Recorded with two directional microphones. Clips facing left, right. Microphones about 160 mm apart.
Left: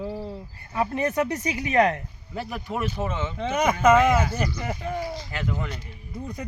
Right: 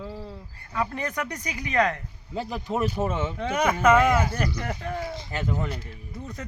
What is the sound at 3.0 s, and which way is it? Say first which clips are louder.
Speech: right 2 dB; 10° right (ahead or behind).